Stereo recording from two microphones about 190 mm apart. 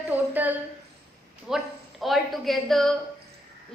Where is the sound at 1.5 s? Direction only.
Centre (ahead or behind).